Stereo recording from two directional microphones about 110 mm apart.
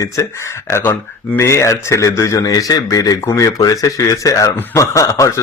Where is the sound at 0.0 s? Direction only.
25° left (ahead or behind).